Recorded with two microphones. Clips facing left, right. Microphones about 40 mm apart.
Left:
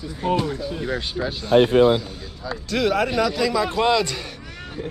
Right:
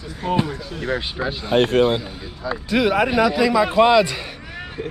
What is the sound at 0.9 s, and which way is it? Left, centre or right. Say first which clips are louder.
Speech: right 5 dB; centre.